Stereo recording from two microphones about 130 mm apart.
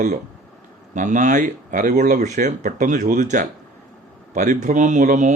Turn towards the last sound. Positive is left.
turn(degrees=-70)  # may be behind; listen again after turning